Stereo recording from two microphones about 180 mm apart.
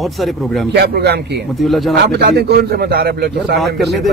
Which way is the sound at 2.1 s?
65° right (ahead or behind).